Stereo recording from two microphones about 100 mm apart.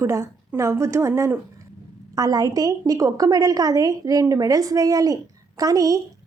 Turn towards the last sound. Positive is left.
turn(degrees=-35)  # may be behind; listen again after turning